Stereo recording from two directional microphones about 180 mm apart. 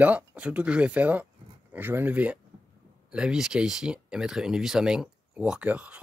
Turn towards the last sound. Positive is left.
turn(degrees=-5)  # may be behind; listen again after turning